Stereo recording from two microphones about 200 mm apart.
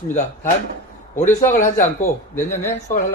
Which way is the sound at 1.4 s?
40° left (ahead or behind).